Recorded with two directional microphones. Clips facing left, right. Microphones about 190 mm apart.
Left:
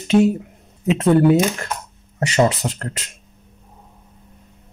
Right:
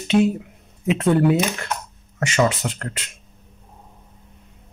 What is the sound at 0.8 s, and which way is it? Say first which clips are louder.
Speech: left 3 dB; 35° left (ahead or behind).